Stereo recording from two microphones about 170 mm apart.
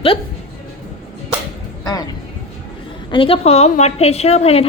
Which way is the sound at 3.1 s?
30° left (ahead or behind).